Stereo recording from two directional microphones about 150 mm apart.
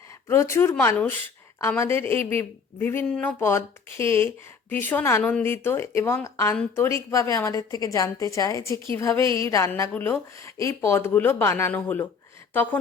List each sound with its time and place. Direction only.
0.3 s a woman's voice: 15° left (ahead or behind)